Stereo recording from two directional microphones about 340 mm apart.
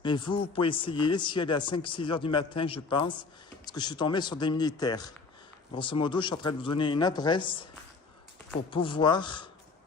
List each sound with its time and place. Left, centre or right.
0.0 s speech: centre
8.7 s speech: centre